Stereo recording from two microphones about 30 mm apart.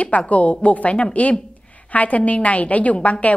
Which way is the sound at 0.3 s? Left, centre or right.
Left.